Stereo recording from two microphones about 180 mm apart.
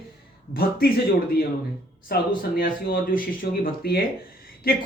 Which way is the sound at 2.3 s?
50° left (ahead or behind).